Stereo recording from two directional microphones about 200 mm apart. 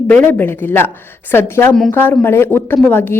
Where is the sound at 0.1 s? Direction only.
10° left (ahead or behind).